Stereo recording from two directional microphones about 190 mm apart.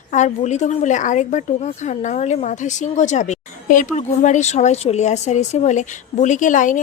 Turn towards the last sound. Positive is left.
turn(degrees=40)  # may be behind; listen again after turning